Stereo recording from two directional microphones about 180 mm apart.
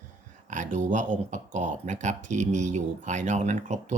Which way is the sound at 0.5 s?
45° right (ahead or behind).